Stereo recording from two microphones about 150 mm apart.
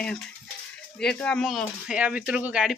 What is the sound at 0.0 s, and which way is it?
Speech, 5° left (ahead or behind).